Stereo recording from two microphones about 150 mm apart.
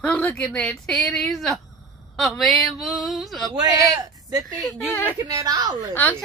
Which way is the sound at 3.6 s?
25° right (ahead or behind).